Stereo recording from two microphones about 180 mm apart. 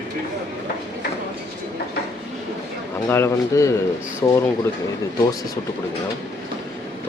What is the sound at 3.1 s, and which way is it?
Speech, 15° left (ahead or behind).